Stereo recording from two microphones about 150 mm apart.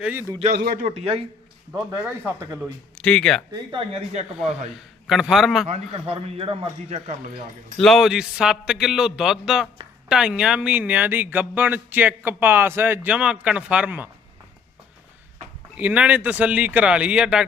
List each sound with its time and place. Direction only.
0.0 s speech: 10° right (ahead or behind)
0.5 s a man's voice: 80° right
0.9 s speech: 40° right (ahead or behind)
2.2 s speech: 20° right (ahead or behind)
2.9 s speech: 5° left (ahead or behind)
3.5 s a man's voice: 30° right (ahead or behind)
5.0 s a man's voice: 5° right (ahead or behind)
5.6 s a man's voice: 45° right (ahead or behind)
6.9 s speech: 50° right (ahead or behind)
7.8 s a man's voice: centre (ahead or behind)
15.8 s speech: 10° right (ahead or behind)